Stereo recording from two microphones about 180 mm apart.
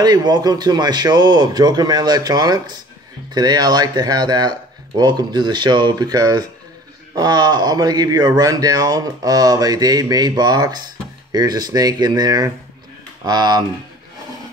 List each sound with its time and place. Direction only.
0.0 s speech: 25° right (ahead or behind)